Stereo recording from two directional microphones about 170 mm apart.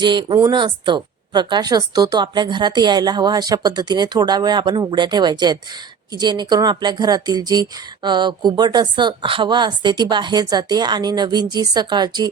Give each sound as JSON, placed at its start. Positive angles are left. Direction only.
{"t": 0.0, "sound": "speech", "side_deg": -25}